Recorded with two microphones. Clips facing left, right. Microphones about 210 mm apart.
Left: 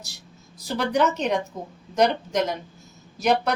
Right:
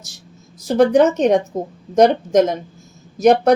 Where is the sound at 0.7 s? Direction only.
50° right (ahead or behind).